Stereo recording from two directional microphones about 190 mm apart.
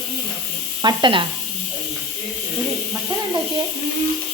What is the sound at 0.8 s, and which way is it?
Speech, 25° right (ahead or behind).